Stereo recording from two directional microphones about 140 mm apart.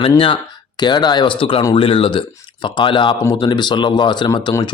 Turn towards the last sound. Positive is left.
turn(degrees=30)  # may be behind; listen again after turning